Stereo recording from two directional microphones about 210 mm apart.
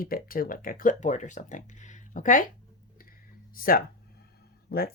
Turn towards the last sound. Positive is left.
turn(degrees=45)  # may be behind; listen again after turning